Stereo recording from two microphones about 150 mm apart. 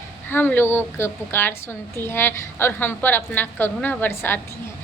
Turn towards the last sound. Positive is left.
turn(degrees=15)  # may be behind; listen again after turning